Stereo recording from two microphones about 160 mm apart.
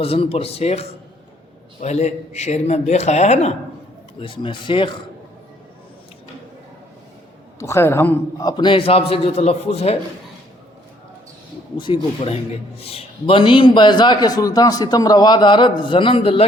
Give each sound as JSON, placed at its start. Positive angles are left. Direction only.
{"t": 0.0, "sound": "a man's voice", "side_deg": 35}
{"t": 4.2, "sound": "a man's voice", "side_deg": 30}
{"t": 7.6, "sound": "a man's voice", "side_deg": 15}
{"t": 8.4, "sound": "a man's voice", "side_deg": 25}
{"t": 11.8, "sound": "a man's voice", "side_deg": 35}